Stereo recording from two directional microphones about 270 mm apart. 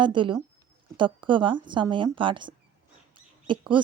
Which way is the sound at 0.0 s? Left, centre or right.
Centre.